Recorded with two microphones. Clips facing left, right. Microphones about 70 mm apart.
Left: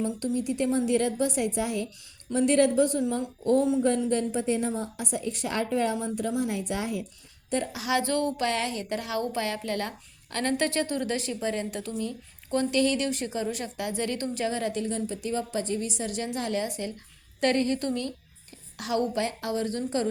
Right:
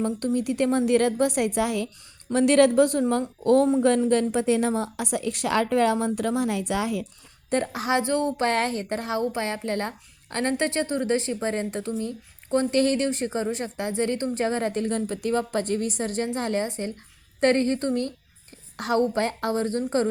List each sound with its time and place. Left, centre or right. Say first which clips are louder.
0.3 s a woman's voice: right 3 dB; right
2.3 s a woman's voice: right 4 dB; right
3.8 s a woman's voice: right 4 dB; right
7.5 s a woman's voice: right 4 dB; right
7.9 s speech: right 2 dB; right
8.4 s a woman's voice: right 4 dB; right